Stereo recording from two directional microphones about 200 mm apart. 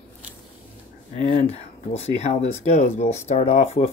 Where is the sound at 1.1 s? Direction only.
35° left (ahead or behind).